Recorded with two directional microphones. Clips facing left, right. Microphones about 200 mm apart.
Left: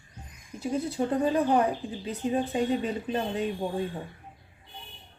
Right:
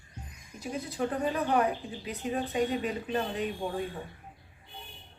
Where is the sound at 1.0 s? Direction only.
30° left (ahead or behind).